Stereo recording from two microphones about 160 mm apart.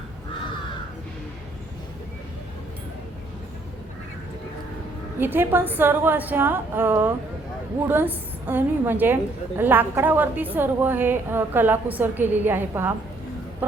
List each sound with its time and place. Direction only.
5.2 s a woman's voice: 15° right (ahead or behind)